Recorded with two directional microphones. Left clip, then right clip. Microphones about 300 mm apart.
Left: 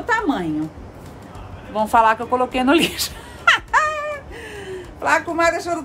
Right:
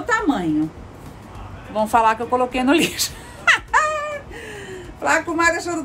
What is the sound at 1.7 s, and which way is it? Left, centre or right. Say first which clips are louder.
Speech: left 1 dB; centre.